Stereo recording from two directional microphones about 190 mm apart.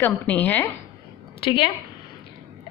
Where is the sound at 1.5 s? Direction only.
25° left (ahead or behind).